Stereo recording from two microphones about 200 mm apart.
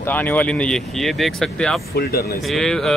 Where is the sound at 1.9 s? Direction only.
50° left (ahead or behind).